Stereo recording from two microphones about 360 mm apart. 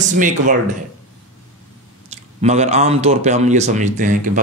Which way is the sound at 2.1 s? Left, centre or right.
Centre.